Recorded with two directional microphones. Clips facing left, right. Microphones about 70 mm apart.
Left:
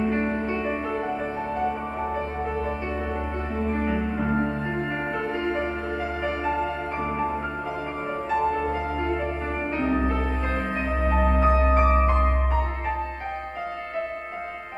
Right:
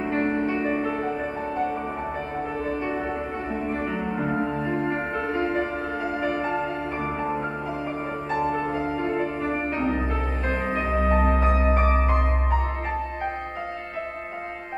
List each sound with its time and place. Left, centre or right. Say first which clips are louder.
5.1 s music: right 1 dB; right
10.7 s music: right 4 dB; centre